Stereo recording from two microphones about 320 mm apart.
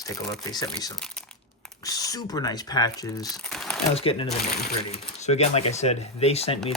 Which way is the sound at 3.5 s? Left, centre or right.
Centre.